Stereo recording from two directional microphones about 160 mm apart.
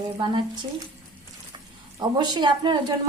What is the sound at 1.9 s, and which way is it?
Speech, 25° right (ahead or behind).